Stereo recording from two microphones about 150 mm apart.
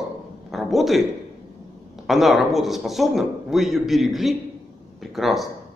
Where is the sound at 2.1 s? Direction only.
Centre (ahead or behind).